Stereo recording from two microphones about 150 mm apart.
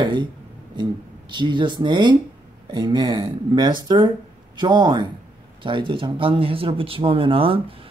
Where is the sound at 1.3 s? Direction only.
30° right (ahead or behind).